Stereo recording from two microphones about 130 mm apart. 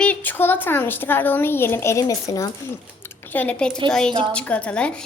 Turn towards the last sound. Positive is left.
turn(degrees=10)  # may be behind; listen again after turning